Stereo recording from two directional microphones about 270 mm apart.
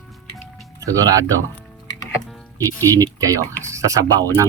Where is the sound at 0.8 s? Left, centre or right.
Centre.